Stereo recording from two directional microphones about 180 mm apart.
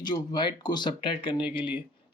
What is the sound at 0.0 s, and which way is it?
Speech, 25° left (ahead or behind).